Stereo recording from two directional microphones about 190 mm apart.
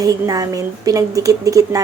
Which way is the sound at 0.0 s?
20° right (ahead or behind).